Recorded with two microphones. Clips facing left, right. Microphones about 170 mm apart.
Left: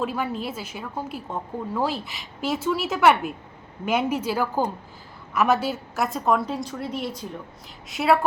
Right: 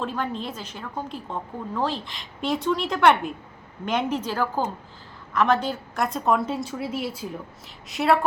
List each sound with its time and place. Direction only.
0.0 s a woman's voice: 10° left (ahead or behind)